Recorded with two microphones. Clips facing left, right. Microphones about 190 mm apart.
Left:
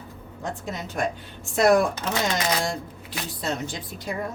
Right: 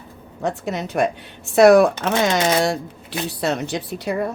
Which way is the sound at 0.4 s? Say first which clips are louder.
Right 8 dB; 70° right (ahead or behind).